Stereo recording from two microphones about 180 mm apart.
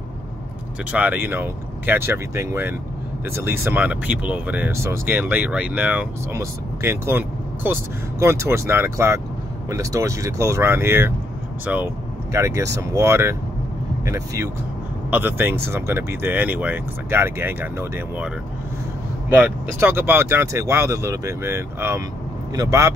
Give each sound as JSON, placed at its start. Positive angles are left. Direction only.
{"t": 0.9, "sound": "speech", "side_deg": -10}